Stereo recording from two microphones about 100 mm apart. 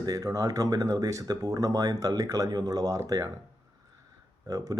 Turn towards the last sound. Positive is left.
turn(degrees=-40)  # may be behind; listen again after turning